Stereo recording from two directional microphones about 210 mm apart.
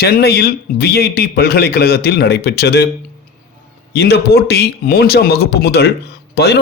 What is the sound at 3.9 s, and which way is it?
Speech, 50° left (ahead or behind).